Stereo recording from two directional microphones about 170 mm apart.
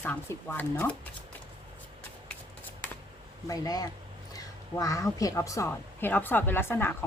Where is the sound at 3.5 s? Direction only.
20° left (ahead or behind).